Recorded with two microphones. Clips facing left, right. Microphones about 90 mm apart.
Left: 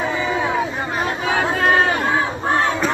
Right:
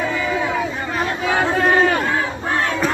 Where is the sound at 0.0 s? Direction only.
20° left (ahead or behind).